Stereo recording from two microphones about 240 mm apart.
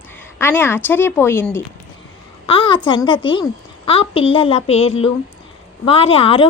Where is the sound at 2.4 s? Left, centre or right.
Left.